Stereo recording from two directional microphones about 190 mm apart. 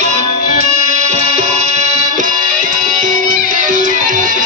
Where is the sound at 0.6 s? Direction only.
40° right (ahead or behind).